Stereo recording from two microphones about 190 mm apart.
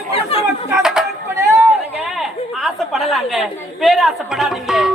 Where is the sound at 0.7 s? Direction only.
5° right (ahead or behind).